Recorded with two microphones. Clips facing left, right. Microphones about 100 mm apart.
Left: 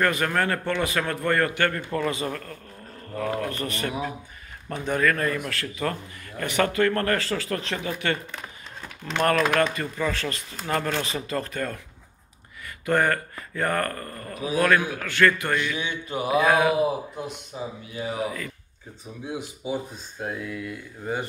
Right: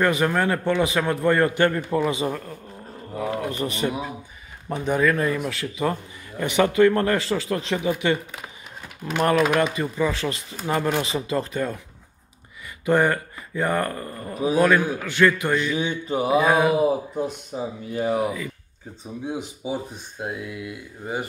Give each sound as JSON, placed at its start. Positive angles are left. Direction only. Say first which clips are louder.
{"t": 0.0, "sound": "a man's voice", "louder": "right 3 dB", "side_deg": -15}
{"t": 12.8, "sound": "a man's voice", "louder": "right 3 dB", "side_deg": -10}
{"t": 15.6, "sound": "music", "louder": "right 4 dB", "side_deg": -30}
{"t": 16.3, "sound": "a man's voice", "louder": "right 1 dB", "side_deg": -10}
{"t": 17.5, "sound": "speech", "louder": "right 3 dB", "side_deg": -35}
{"t": 17.9, "sound": "speech", "louder": "right 8 dB", "side_deg": -50}
{"t": 18.2, "sound": "a man's voice", "louder": "right 4 dB", "side_deg": -10}
{"t": 19.2, "sound": "a man's voice", "louder": "right 2 dB", "side_deg": -20}